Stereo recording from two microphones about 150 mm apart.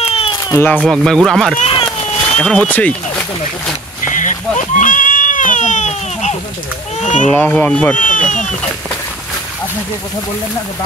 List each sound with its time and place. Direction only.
0.0 s a sound: 40° left (ahead or behind)
0.5 s speech: 15° left (ahead or behind)
0.7 s speech: 5° right (ahead or behind)
1.7 s a sound: 35° left (ahead or behind)
2.2 s speech: 5° left (ahead or behind)
4.1 s a sound: 55° left (ahead or behind)
7.0 s a child's voice: 55° left (ahead or behind)
7.2 s speech: 10° left (ahead or behind)
8.0 s speech: 60° left (ahead or behind)